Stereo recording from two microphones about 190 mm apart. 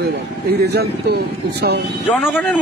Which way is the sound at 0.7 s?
60° right (ahead or behind).